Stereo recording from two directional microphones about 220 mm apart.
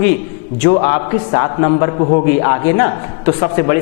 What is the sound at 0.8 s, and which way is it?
A man's voice, 20° left (ahead or behind).